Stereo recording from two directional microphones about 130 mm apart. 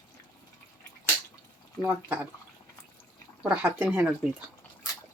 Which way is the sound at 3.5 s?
10° right (ahead or behind).